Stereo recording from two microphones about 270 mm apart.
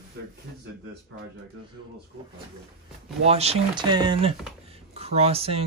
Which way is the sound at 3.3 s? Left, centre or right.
Right.